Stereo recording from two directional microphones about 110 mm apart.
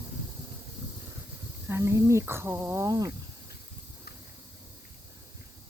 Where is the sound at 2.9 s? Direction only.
35° right (ahead or behind).